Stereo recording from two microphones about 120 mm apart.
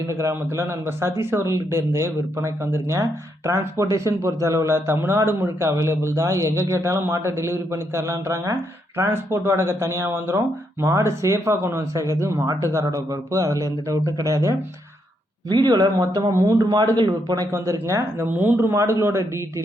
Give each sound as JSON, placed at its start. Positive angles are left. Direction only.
{"t": 0.1, "sound": "speech", "side_deg": -25}